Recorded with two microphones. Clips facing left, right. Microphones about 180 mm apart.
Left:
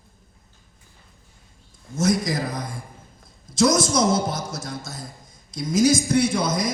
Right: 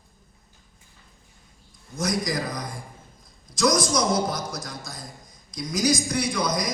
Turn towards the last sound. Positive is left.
turn(degrees=25)  # may be behind; listen again after turning